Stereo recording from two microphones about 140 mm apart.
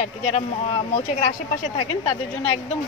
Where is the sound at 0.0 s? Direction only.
50° left (ahead or behind).